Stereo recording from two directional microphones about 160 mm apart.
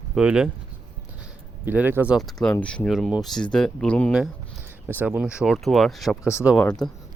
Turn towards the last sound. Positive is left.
turn(degrees=5)  # may be behind; listen again after turning